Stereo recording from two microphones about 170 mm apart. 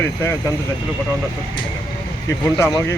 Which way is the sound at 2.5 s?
20° left (ahead or behind).